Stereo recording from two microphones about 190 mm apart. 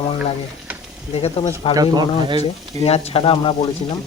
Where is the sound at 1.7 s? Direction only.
20° right (ahead or behind).